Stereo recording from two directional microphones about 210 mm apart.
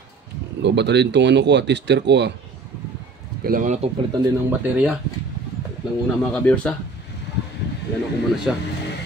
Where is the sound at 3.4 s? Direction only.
40° right (ahead or behind).